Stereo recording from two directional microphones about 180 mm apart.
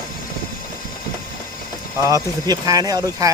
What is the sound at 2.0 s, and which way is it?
Speech, 20° right (ahead or behind).